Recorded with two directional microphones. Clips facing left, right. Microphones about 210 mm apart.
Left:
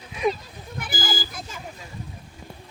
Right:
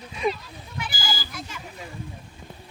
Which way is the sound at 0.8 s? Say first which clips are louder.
Left 3 dB; 50° left (ahead or behind).